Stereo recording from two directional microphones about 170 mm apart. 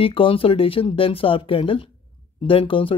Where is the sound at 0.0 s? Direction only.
30° left (ahead or behind).